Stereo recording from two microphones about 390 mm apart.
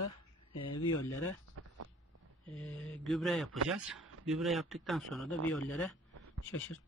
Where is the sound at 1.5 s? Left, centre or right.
Right.